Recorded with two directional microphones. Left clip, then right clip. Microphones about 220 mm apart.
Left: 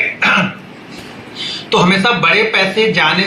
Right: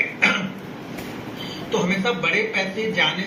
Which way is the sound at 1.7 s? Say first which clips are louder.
Left 11 dB; 45° left (ahead or behind).